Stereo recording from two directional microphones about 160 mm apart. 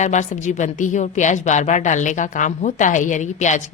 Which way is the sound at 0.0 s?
50° left (ahead or behind).